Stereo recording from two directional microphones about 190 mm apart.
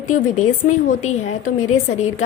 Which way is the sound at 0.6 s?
40° left (ahead or behind).